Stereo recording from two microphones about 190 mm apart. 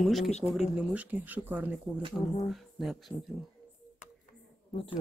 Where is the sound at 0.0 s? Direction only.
Centre (ahead or behind).